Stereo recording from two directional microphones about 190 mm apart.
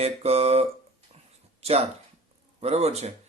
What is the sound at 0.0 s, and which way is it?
Speech, 35° right (ahead or behind).